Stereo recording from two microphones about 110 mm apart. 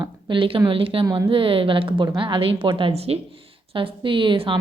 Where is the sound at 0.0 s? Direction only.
50° right (ahead or behind).